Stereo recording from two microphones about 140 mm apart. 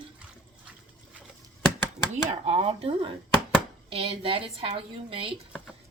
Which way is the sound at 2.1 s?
50° right (ahead or behind).